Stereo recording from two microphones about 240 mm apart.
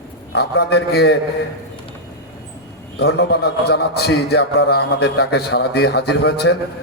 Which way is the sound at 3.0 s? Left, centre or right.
Left.